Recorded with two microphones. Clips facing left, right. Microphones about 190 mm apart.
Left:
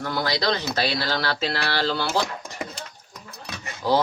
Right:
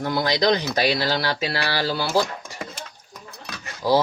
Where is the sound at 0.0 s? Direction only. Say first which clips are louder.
Right 4 dB; 15° right (ahead or behind).